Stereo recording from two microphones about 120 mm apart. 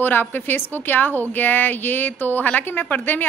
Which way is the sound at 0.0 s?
15° left (ahead or behind).